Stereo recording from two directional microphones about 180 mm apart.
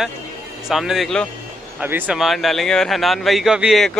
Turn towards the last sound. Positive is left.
turn(degrees=0)  # may be behind; listen again after turning